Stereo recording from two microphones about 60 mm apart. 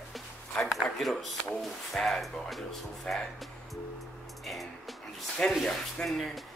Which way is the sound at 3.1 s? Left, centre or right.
Centre.